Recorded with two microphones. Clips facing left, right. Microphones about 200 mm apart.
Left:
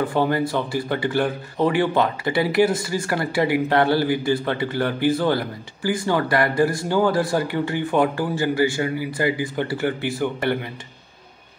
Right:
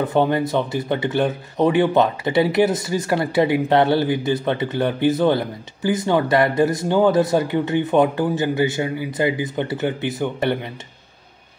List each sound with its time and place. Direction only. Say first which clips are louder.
0.0 s speech: right 2 dB; 20° right (ahead or behind)